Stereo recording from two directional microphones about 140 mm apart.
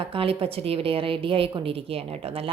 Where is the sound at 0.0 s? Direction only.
40° right (ahead or behind).